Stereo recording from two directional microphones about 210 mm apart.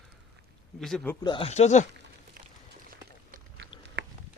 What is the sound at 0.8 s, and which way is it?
Speech, centre (ahead or behind).